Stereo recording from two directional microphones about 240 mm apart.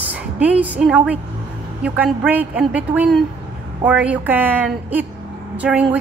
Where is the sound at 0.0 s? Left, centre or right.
Centre.